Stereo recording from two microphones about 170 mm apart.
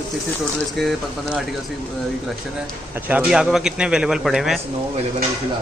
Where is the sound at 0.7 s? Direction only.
Centre (ahead or behind).